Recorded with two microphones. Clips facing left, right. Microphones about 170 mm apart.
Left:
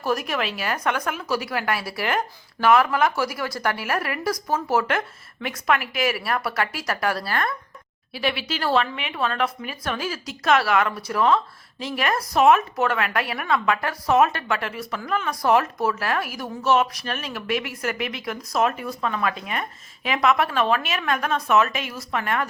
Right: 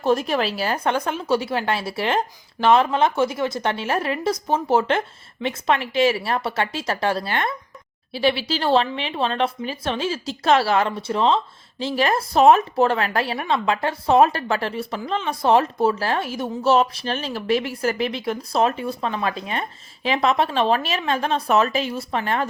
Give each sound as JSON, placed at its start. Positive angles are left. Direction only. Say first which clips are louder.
{"t": 0.0, "sound": "speech", "louder": "right 5 dB", "side_deg": -25}